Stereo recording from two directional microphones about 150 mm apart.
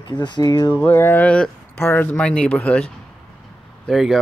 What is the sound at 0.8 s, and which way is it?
Speech, 10° left (ahead or behind).